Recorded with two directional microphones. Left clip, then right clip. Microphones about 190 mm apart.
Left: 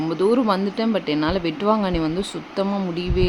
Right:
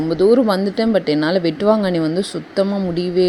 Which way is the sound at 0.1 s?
15° right (ahead or behind).